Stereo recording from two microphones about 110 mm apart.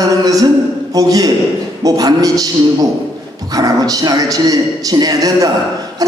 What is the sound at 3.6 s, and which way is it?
A man's voice, 35° right (ahead or behind).